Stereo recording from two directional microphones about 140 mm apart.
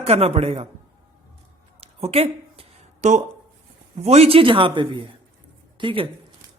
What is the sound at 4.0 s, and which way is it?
Speech, 50° right (ahead or behind).